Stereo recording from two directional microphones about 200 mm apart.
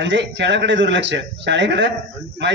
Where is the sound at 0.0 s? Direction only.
65° right (ahead or behind).